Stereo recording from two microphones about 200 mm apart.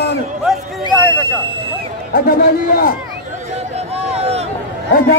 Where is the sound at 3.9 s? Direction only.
30° right (ahead or behind).